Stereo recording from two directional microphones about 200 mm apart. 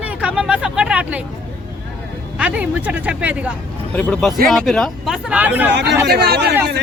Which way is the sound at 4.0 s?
5° left (ahead or behind).